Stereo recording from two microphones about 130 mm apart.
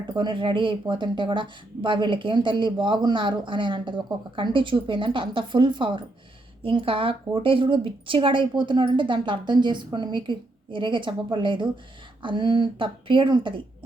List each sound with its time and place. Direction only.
0.1 s speech: 35° right (ahead or behind)